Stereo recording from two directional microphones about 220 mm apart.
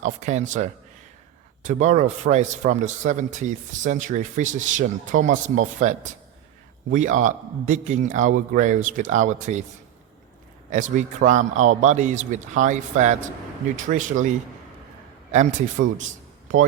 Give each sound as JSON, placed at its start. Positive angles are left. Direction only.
{"t": 0.0, "sound": "a man's voice", "side_deg": -30}
{"t": 10.7, "sound": "a man's voice", "side_deg": -35}
{"t": 15.3, "sound": "a man's voice", "side_deg": -35}